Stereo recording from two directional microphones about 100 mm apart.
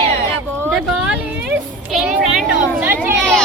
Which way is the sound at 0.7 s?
10° right (ahead or behind).